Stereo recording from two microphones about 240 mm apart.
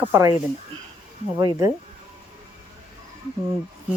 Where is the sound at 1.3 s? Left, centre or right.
Centre.